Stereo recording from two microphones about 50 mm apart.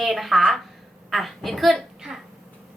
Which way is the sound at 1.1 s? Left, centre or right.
Centre.